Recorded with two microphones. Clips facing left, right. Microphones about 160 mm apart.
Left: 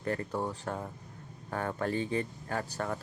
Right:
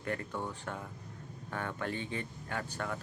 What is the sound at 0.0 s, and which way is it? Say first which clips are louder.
Speech: left 4 dB; 35° left (ahead or behind).